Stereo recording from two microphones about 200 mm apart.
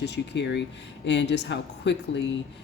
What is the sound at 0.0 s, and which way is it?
Speech, 60° left (ahead or behind).